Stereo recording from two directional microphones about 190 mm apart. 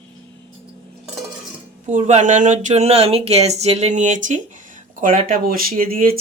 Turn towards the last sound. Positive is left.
turn(degrees=-50)  # may be behind; listen again after turning